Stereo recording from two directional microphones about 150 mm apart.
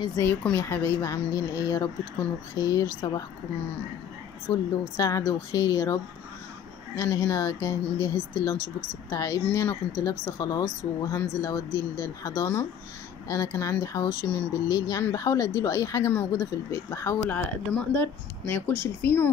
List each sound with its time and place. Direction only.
0.2 s speech: 15° left (ahead or behind)
4.5 s speech: 25° left (ahead or behind)
7.0 s speech: 20° left (ahead or behind)
18.5 s speech: 15° left (ahead or behind)